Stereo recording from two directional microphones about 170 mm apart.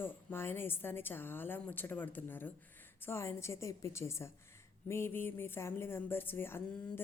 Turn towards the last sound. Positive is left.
turn(degrees=15)  # may be behind; listen again after turning